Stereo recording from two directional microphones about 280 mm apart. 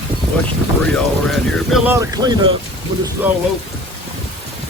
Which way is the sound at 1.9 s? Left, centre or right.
Centre.